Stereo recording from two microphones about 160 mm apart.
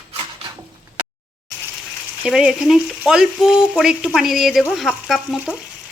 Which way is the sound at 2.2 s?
5° right (ahead or behind).